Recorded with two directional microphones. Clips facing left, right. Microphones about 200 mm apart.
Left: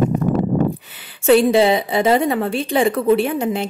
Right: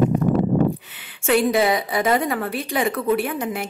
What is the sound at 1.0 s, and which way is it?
A woman's voice, 35° left (ahead or behind).